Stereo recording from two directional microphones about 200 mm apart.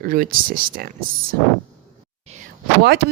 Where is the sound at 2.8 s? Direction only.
55° right (ahead or behind).